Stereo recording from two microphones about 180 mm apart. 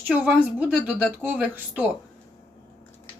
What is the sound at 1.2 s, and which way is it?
Speech, 10° right (ahead or behind).